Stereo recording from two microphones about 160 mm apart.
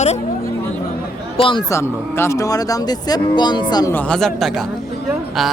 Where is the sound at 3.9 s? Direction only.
5° left (ahead or behind).